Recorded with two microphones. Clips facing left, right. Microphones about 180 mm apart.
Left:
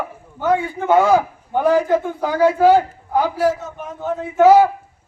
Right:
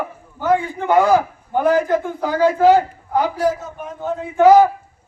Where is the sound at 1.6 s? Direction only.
20° left (ahead or behind).